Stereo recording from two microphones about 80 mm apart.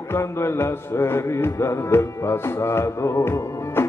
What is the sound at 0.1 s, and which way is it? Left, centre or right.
Music, left.